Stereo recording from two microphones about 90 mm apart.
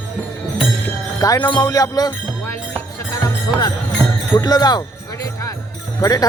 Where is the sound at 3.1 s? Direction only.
40° left (ahead or behind).